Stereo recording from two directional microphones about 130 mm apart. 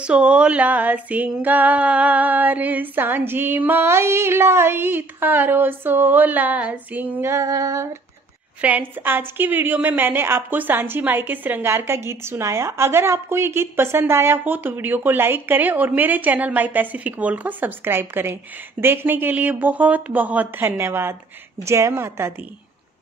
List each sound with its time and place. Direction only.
0.0 s female singing: 10° right (ahead or behind)
8.5 s female singing: 10° right (ahead or behind)
21.6 s a woman's voice: 20° right (ahead or behind)